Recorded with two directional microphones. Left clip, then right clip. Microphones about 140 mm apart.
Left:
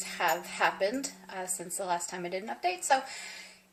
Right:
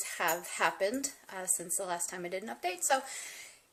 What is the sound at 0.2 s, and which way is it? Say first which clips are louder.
A woman's voice: left 3 dB; 25° right (ahead or behind).